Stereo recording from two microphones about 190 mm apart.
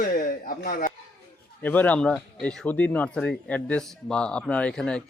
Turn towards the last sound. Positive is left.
turn(degrees=5)  # may be behind; listen again after turning